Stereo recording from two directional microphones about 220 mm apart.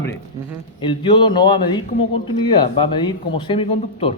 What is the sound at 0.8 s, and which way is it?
Speech, 20° left (ahead or behind).